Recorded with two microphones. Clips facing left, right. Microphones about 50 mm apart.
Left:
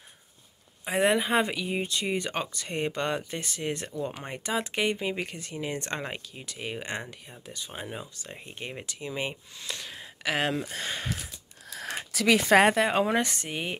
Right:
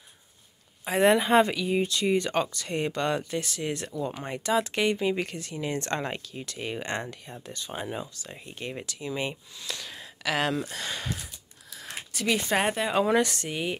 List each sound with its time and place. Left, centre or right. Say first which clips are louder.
0.8 s speech: right 3 dB; centre
8.2 s speech: right 1 dB; left
11.7 s a sound: left 4 dB; left
13.0 s speech: right 3 dB; left